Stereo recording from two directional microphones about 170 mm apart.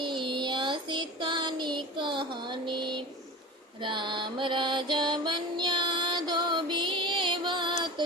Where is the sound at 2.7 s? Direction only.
25° right (ahead or behind).